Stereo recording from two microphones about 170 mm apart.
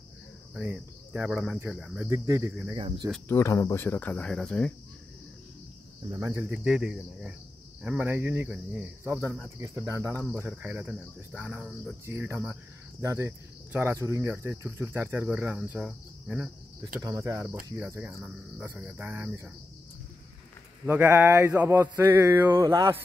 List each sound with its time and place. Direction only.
0.6 s speech: 10° right (ahead or behind); by 3.1 s 25° right (ahead or behind)
3.3 s speech: 15° left (ahead or behind)
6.1 s speech: 15° right (ahead or behind)
17.2 s speech: 15° right (ahead or behind)
20.8 s speech: 10° right (ahead or behind)